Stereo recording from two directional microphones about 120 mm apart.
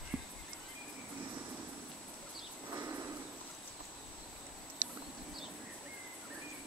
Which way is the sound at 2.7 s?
25° right (ahead or behind).